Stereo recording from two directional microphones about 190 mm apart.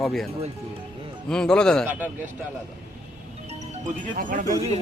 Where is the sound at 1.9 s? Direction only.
10° right (ahead or behind).